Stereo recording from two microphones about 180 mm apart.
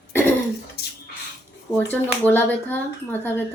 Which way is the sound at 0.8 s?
60° left (ahead or behind).